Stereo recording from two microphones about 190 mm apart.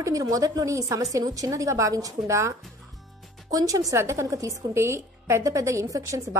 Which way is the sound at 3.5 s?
20° right (ahead or behind).